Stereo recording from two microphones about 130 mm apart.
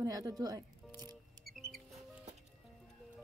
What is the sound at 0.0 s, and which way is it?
Speech, 30° right (ahead or behind).